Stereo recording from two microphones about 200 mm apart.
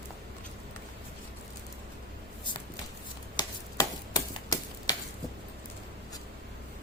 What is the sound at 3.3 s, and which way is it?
Typewriter, 20° left (ahead or behind).